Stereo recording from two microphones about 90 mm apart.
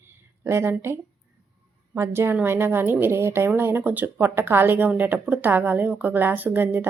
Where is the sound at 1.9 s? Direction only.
30° right (ahead or behind).